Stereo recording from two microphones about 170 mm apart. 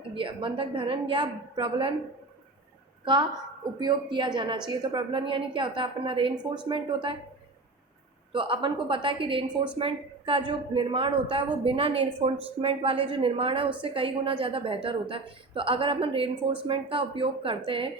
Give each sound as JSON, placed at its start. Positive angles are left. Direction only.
{"t": 0.1, "sound": "speech", "side_deg": -30}
{"t": 3.0, "sound": "a woman's voice", "side_deg": -25}
{"t": 8.3, "sound": "a woman's voice", "side_deg": -30}
{"t": 16.3, "sound": "speech", "side_deg": -10}
{"t": 16.6, "sound": "speech", "side_deg": -35}